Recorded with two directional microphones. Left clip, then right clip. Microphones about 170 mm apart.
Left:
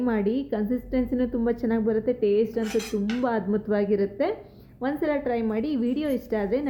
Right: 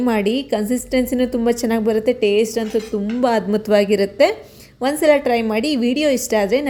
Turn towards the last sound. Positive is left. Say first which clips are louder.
# right 9 dB
turn(degrees=-30)  # may be behind; listen again after turning